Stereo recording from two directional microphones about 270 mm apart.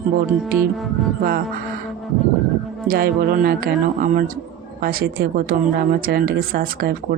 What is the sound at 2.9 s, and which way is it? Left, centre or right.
Speech, right.